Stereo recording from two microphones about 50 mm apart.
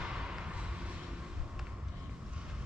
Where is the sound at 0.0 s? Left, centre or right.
Centre.